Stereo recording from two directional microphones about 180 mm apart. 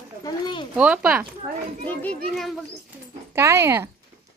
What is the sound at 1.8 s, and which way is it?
Speech, 10° left (ahead or behind).